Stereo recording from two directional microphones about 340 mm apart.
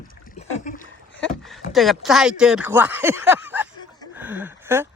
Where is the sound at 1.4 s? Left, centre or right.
Centre.